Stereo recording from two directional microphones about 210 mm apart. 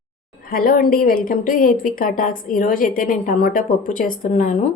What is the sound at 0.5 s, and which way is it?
A woman's voice, 45° left (ahead or behind).